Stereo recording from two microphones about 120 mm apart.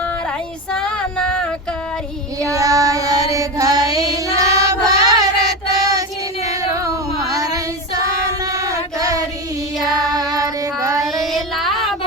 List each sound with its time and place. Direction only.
0.7 s female singing: 5° left (ahead or behind)
2.5 s child singing: 30° right (ahead or behind)
6.8 s female singing: 30° right (ahead or behind)
8.5 s a sound: 30° right (ahead or behind)
9.8 s child singing: 30° right (ahead or behind)
11.3 s music: centre (ahead or behind)